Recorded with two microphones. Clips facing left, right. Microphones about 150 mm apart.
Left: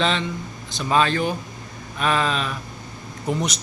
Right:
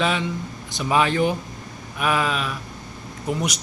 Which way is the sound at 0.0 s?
10° right (ahead or behind).